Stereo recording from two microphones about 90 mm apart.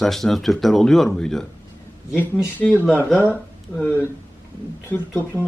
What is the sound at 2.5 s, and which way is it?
Speech, 20° left (ahead or behind).